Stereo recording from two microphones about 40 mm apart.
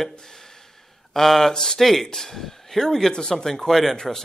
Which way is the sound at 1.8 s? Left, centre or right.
Centre.